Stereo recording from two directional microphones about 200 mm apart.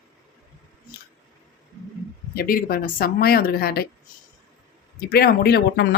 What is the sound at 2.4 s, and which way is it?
A woman's voice, 45° left (ahead or behind).